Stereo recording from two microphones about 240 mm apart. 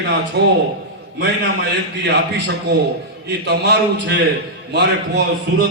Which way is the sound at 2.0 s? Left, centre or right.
Right.